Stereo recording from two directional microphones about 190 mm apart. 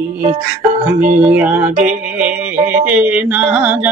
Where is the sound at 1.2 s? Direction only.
10° right (ahead or behind).